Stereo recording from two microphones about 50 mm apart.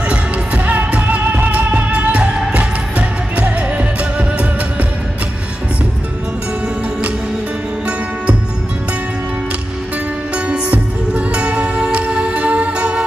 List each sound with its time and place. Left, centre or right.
0.1 s music: right
10.3 s music: right